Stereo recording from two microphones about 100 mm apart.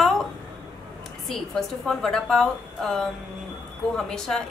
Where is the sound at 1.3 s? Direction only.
5° left (ahead or behind).